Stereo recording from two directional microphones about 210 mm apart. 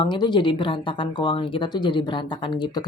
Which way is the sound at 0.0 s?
20° left (ahead or behind).